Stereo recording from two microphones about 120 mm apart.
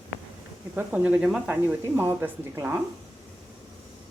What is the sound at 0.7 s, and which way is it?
A woman's voice, 15° right (ahead or behind).